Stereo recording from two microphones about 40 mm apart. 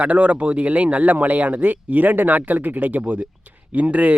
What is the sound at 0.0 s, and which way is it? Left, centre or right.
Speech, right.